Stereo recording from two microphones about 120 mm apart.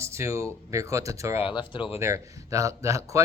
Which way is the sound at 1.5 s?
40° left (ahead or behind).